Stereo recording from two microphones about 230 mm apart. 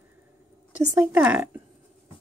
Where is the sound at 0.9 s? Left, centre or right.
Centre.